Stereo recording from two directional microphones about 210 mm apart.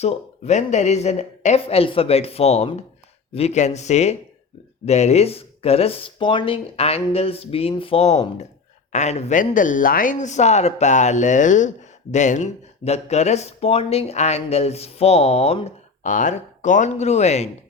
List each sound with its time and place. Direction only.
0.0 s speech: 30° left (ahead or behind)